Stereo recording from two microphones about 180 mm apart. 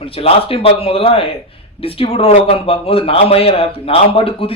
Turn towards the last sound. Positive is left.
turn(degrees=30)  # may be behind; listen again after turning